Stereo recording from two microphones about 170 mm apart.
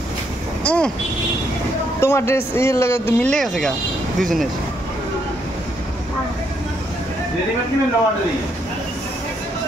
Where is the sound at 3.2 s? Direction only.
5° left (ahead or behind).